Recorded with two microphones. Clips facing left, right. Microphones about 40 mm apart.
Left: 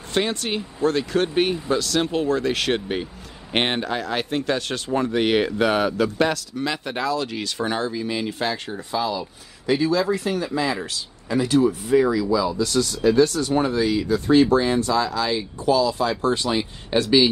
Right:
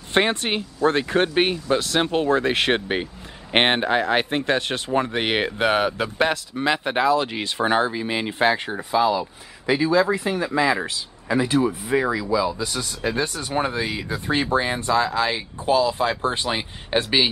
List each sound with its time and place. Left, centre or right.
0.1 s speech: right
8.9 s speech: centre; by 17.3 s right